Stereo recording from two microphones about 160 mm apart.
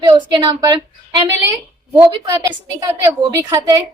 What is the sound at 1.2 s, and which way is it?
Speech, 15° right (ahead or behind).